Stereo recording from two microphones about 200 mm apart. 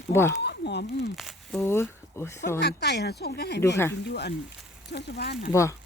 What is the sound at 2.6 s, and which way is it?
Speech, 55° left (ahead or behind).